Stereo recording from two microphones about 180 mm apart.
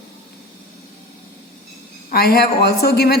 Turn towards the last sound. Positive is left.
turn(degrees=60)  # may be behind; listen again after turning